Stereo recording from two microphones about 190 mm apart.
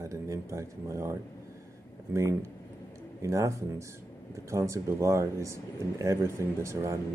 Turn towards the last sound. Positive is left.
turn(degrees=-15)  # may be behind; listen again after turning